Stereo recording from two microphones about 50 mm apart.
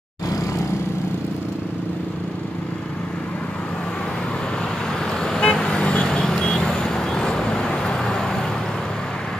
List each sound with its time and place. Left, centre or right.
5.2 s vehicle: centre